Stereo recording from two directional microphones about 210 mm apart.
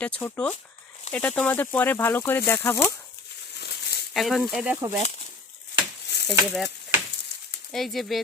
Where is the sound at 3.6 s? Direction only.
50° left (ahead or behind).